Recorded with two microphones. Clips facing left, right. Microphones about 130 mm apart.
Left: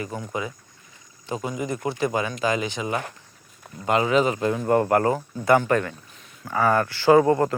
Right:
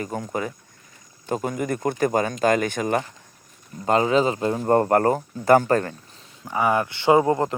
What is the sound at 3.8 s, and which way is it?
Speech, 35° right (ahead or behind).